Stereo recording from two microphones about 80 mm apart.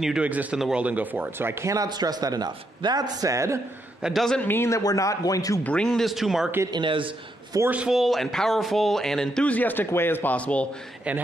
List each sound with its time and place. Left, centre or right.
0.2 s speech: centre
0.6 s speech: centre
0.8 s speech: centre; by 1.9 s right
1.9 s a man's voice: right
4.0 s speech: centre
4.4 s a man's voice: left
4.6 s speech: left
5.6 s speech: centre
5.9 s speech: centre
6.7 s speech: right
7.5 s a man's voice: right
7.9 s a man's voice: centre
11.1 s speech: centre